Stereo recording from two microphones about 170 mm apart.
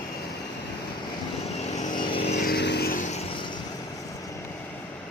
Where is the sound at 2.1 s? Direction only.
35° left (ahead or behind).